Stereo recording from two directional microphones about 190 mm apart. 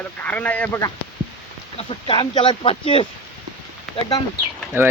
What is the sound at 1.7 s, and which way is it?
Speech, 25° left (ahead or behind).